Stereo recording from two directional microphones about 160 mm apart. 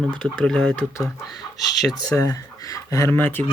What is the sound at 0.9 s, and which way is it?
Speech, 25° left (ahead or behind).